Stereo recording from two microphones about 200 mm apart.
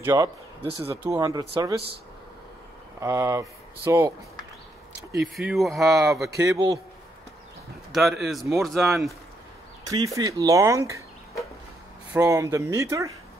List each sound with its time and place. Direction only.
0.0 s speech: 10° right (ahead or behind)
0.6 s speech: 30° right (ahead or behind)
0.8 s speech: 15° right (ahead or behind)
3.0 s speech: 15° right (ahead or behind)
5.3 s speech: centre (ahead or behind)
6.3 s speech: 15° right (ahead or behind)
7.9 s speech: centre (ahead or behind)
9.8 s speech: 15° right (ahead or behind)
12.1 s speech: 15° right (ahead or behind)